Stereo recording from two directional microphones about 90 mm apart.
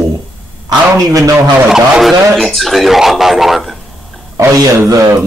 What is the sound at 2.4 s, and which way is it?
Speech, 5° left (ahead or behind).